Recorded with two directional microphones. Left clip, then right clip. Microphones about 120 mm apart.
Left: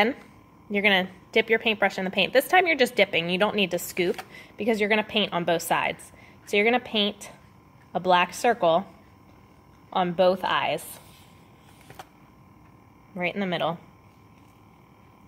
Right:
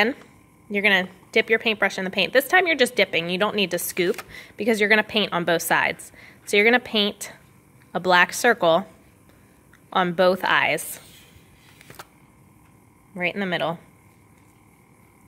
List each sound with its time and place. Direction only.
0.7 s a woman's voice: 15° right (ahead or behind); by 8.8 s 50° right (ahead or behind)
9.8 s a woman's voice: 50° right (ahead or behind)
13.1 s a woman's voice: 25° right (ahead or behind)